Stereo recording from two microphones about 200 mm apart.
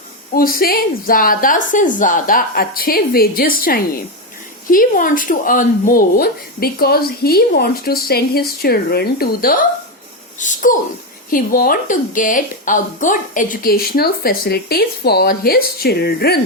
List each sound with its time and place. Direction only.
0.3 s speech: 45° left (ahead or behind)